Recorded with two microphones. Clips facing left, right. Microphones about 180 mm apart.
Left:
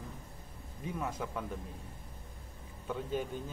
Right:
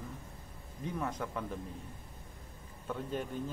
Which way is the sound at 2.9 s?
5° left (ahead or behind).